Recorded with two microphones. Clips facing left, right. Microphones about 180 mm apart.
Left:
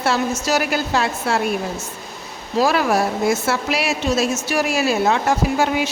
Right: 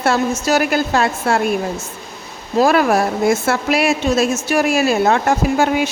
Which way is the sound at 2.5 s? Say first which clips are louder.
Right 4 dB; 50° right (ahead or behind).